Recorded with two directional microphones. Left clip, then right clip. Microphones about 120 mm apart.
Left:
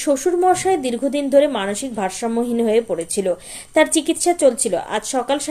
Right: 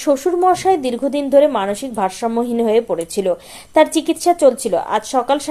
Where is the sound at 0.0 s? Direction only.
25° right (ahead or behind).